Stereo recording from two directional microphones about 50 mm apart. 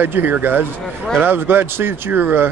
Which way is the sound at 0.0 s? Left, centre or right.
Right.